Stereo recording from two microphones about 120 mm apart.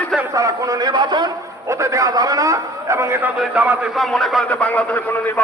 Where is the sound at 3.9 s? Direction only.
Centre (ahead or behind).